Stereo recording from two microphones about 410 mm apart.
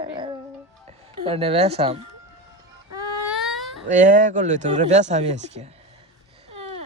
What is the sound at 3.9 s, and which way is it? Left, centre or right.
Speech, centre.